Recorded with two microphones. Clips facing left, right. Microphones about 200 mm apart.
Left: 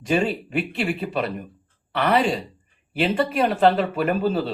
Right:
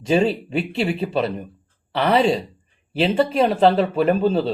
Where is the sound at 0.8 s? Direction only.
30° right (ahead or behind).